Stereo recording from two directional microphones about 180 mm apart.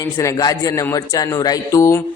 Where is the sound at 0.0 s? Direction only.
20° left (ahead or behind).